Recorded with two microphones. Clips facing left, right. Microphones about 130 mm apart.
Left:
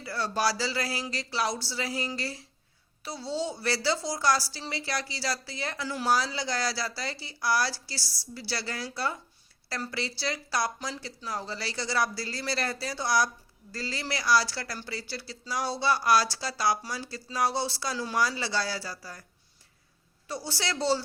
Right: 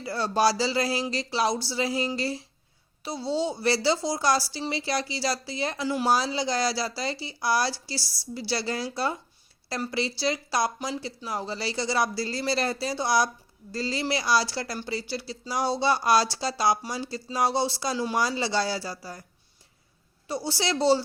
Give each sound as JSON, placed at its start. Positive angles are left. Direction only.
{"t": 0.0, "sound": "speech", "side_deg": -20}
{"t": 20.2, "sound": "speech", "side_deg": -15}